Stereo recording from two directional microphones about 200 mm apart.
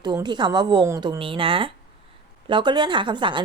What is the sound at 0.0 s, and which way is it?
A woman's voice, 20° right (ahead or behind).